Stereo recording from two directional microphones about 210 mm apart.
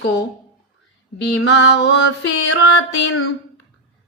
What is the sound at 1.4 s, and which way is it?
Music, 55° left (ahead or behind).